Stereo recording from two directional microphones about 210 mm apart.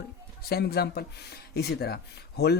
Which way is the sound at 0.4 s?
50° left (ahead or behind).